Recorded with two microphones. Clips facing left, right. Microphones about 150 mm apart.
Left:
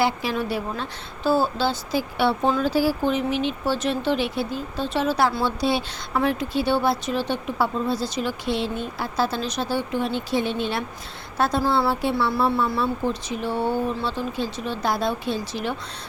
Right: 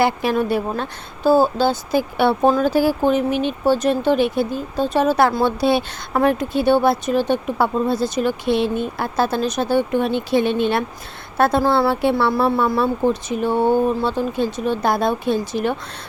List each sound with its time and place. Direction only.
0.0 s a woman's voice: 55° right (ahead or behind)